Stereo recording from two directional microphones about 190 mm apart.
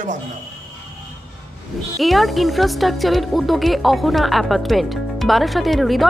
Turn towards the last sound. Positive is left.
turn(degrees=0)  # may be behind; listen again after turning